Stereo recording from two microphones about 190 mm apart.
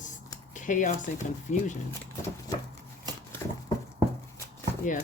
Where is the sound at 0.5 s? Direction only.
40° left (ahead or behind).